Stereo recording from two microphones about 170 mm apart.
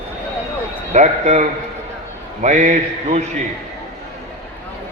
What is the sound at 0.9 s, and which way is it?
A man's voice, 40° right (ahead or behind).